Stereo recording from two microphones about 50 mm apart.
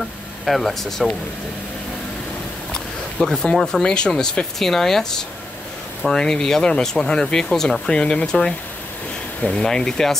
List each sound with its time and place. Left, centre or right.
0.5 s speech: centre
2.7 s speech: centre
6.0 s speech: centre
7.9 s speech: centre